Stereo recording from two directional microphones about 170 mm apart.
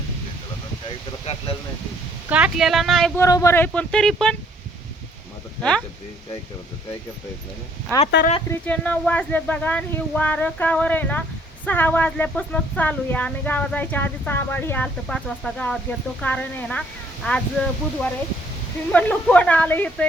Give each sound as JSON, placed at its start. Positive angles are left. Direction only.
{"t": 1.2, "sound": "a sound", "side_deg": 35}
{"t": 2.3, "sound": "speech", "side_deg": -5}
{"t": 3.2, "sound": "speech", "side_deg": 20}
{"t": 8.4, "sound": "speech", "side_deg": 10}